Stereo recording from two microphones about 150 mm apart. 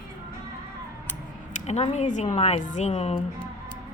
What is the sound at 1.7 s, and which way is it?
A woman's voice, 50° left (ahead or behind).